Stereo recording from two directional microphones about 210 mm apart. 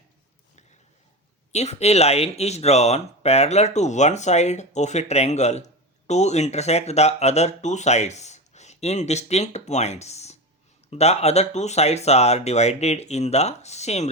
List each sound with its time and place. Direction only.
1.5 s speech: 30° left (ahead or behind)